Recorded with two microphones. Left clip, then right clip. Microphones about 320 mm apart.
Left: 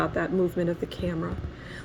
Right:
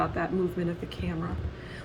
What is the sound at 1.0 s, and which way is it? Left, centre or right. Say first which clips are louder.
Speech: left 5 dB; left.